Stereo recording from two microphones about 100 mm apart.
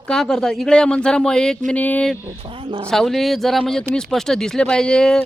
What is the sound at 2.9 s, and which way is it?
Speech, 5° left (ahead or behind).